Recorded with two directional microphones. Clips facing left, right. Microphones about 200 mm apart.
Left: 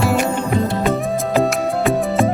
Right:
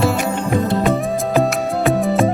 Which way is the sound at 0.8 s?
Centre (ahead or behind).